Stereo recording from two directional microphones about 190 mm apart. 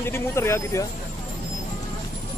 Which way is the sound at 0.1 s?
15° left (ahead or behind).